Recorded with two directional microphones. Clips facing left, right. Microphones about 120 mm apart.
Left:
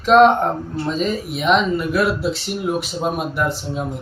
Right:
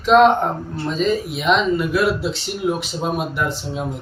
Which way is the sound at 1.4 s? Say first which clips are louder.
Left 1 dB; centre (ahead or behind).